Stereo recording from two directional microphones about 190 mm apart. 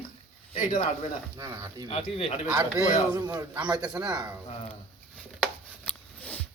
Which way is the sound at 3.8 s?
5° right (ahead or behind).